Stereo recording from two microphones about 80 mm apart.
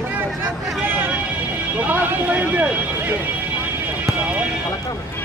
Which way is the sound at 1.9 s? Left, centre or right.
Centre.